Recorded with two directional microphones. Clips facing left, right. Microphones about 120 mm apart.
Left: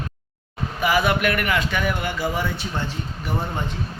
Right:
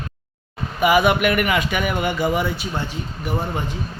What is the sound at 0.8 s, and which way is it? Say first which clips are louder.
A man's voice: right 4 dB; 15° right (ahead or behind).